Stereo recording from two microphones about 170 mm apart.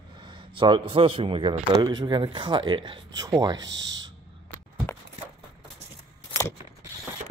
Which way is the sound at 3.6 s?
90° right.